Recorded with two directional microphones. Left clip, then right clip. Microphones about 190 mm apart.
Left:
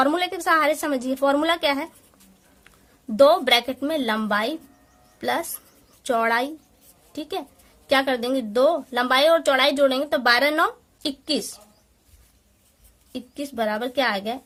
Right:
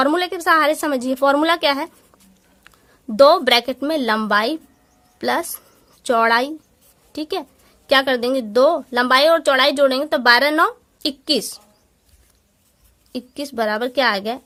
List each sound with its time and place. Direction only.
0.0 s a woman's voice: 30° right (ahead or behind)
13.1 s a woman's voice: 35° right (ahead or behind)